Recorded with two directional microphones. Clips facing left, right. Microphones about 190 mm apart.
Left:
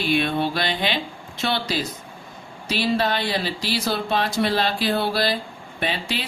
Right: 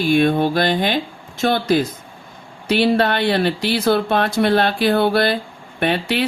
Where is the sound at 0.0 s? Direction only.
45° right (ahead or behind).